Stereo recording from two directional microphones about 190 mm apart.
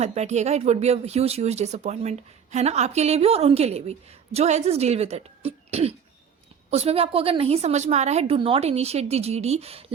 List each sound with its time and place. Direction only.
0.0 s speech: 35° right (ahead or behind)